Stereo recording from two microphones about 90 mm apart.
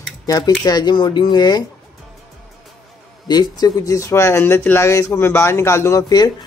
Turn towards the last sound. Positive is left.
turn(degrees=45)  # may be behind; listen again after turning